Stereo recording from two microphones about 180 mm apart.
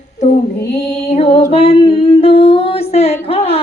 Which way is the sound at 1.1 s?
35° left (ahead or behind).